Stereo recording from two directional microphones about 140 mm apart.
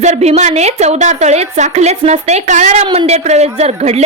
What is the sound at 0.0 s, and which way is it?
A woman's voice, 50° right (ahead or behind).